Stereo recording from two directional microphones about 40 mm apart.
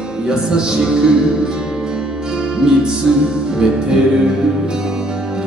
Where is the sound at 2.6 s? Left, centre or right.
Centre.